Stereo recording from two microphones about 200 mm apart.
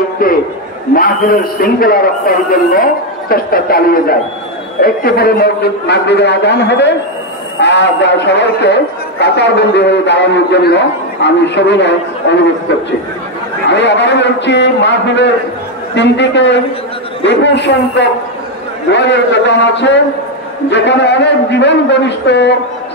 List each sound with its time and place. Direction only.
0.2 s a man's voice: 45° left (ahead or behind)
13.7 s a man's voice: 60° left (ahead or behind)